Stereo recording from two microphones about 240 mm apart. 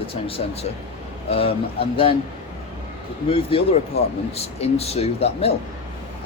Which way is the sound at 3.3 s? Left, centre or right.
Left.